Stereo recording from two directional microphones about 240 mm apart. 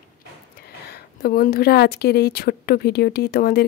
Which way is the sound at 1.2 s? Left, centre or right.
Left.